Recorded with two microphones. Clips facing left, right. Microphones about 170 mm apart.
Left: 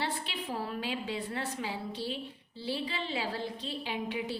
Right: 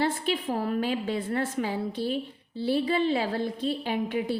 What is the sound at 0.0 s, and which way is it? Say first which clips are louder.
A woman's voice: right 9 dB; 45° right (ahead or behind).